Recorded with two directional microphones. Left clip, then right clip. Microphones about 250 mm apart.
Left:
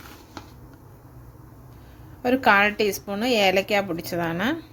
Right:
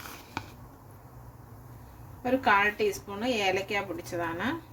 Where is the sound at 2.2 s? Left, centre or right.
Left.